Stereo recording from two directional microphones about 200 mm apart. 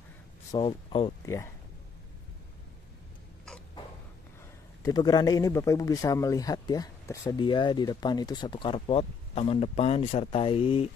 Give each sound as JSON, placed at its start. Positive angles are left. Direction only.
{"t": 0.5, "sound": "speech", "side_deg": 25}
{"t": 1.2, "sound": "speech", "side_deg": 15}
{"t": 4.8, "sound": "speech", "side_deg": 20}